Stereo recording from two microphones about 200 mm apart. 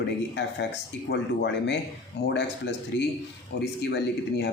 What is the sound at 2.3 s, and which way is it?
Speech, 60° left (ahead or behind).